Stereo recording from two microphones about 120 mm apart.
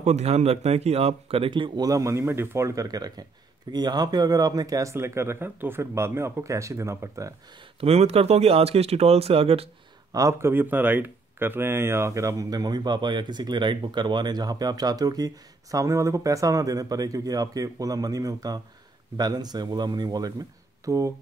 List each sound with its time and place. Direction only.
0.0 s speech: 65° right (ahead or behind); by 1.9 s 40° right (ahead or behind)
1.9 s speech: 25° right (ahead or behind)
7.8 s speech: 60° right (ahead or behind)
10.1 s speech: 25° right (ahead or behind)